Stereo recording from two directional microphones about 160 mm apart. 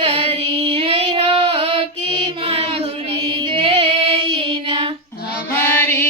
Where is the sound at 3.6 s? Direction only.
30° right (ahead or behind).